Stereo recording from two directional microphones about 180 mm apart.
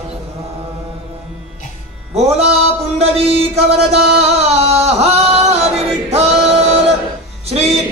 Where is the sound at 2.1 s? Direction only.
35° right (ahead or behind).